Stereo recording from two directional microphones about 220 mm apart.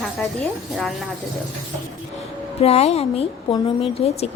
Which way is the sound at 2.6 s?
30° left (ahead or behind).